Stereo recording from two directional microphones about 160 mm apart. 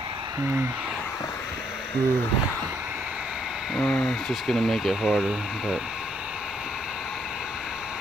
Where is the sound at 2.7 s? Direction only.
5° right (ahead or behind).